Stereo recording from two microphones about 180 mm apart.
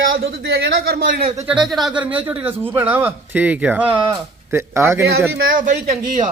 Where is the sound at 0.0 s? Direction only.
90° right; by 1.2 s 55° right (ahead or behind).